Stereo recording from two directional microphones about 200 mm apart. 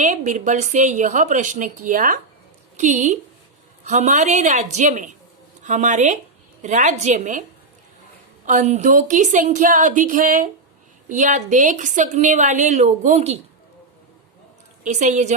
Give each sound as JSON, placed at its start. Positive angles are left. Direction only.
{"t": 0.0, "sound": "a woman's voice", "side_deg": -35}
{"t": 8.4, "sound": "a woman's voice", "side_deg": -35}
{"t": 14.8, "sound": "a woman's voice", "side_deg": -35}